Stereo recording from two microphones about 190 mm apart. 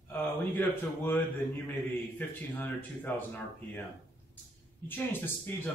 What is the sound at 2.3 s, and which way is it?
A man's voice, 10° left (ahead or behind).